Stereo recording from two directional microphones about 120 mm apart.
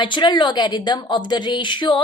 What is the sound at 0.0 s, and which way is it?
A woman's voice, 40° left (ahead or behind).